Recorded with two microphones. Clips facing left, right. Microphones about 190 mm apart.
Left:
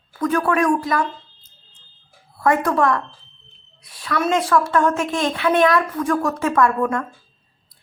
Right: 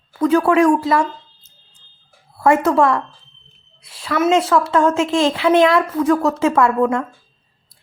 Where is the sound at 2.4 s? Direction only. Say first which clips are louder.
Right 4 dB; 25° right (ahead or behind).